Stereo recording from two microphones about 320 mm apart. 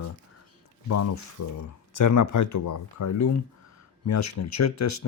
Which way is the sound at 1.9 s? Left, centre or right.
Left.